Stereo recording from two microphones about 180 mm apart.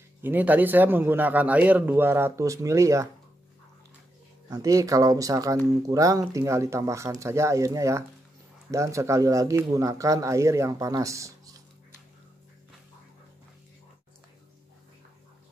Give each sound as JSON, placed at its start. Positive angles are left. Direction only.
{"t": 0.2, "sound": "a man's voice", "side_deg": -10}
{"t": 4.5, "sound": "a man's voice", "side_deg": -20}